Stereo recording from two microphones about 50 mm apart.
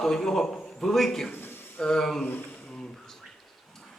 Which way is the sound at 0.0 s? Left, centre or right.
Centre.